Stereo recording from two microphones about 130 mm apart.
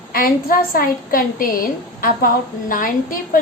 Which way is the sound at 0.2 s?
90° left.